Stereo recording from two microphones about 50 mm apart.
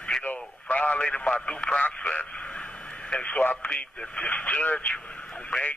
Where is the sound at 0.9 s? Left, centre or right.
Left.